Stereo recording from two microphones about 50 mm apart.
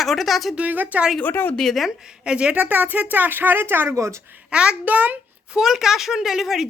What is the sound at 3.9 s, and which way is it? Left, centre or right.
Speech, right.